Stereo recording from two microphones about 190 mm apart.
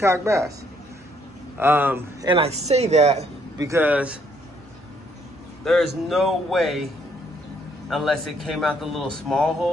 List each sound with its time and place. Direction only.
0.0 s a man's voice: 15° right (ahead or behind)
1.6 s a man's voice: 10° right (ahead or behind)
2.2 s speech: 30° right (ahead or behind)
3.5 s a man's voice: 15° right (ahead or behind)
5.6 s speech: centre (ahead or behind)
7.9 s speech: centre (ahead or behind)